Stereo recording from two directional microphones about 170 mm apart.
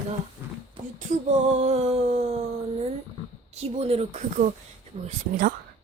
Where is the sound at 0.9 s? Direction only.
40° right (ahead or behind).